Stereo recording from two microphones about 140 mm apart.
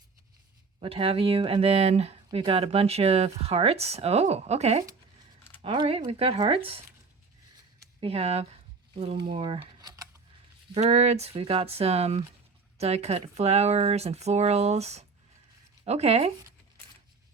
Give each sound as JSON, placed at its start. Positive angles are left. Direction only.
{"t": 0.8, "sound": "speech", "side_deg": -40}
{"t": 5.6, "sound": "speech", "side_deg": -40}
{"t": 8.0, "sound": "speech", "side_deg": -45}
{"t": 9.3, "sound": "a sound", "side_deg": -35}
{"t": 10.8, "sound": "speech", "side_deg": -50}